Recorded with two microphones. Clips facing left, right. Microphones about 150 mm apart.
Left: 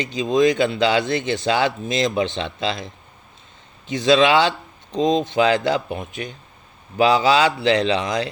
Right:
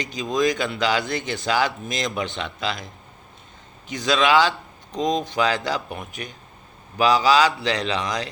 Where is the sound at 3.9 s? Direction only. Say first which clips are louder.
Left 4 dB; 25° left (ahead or behind).